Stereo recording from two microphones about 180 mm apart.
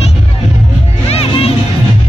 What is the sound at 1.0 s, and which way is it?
Music, 35° left (ahead or behind).